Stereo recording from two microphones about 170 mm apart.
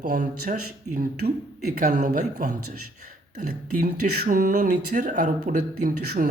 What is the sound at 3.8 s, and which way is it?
Speech, 50° right (ahead or behind).